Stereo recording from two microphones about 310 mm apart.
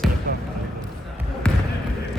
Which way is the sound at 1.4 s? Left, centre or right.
Centre.